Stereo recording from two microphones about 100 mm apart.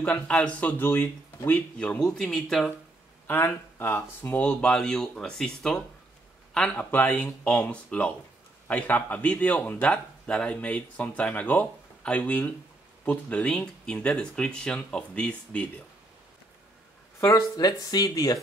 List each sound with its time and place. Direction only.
0.0 s speech: 15° left (ahead or behind)
3.3 s speech: 20° left (ahead or behind)
4.5 s speech: 10° left (ahead or behind)
17.2 s speech: 35° left (ahead or behind)